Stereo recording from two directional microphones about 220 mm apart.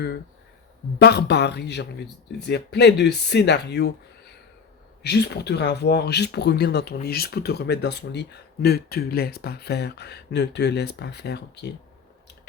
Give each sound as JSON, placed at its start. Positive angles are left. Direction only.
{"t": 0.9, "sound": "speech", "side_deg": 50}
{"t": 5.0, "sound": "speech", "side_deg": 50}